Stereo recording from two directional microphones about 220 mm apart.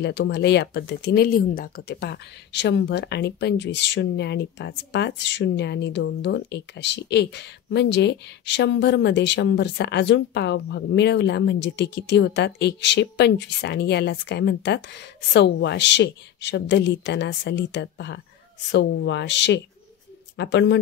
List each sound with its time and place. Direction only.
0.0 s speech: 50° left (ahead or behind)